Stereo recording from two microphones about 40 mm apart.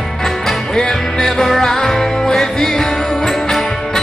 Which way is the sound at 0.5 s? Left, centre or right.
Centre.